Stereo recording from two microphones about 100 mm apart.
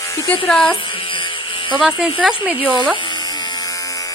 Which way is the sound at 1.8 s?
5° right (ahead or behind).